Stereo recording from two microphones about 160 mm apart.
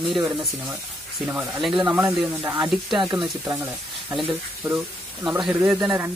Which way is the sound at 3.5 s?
15° right (ahead or behind).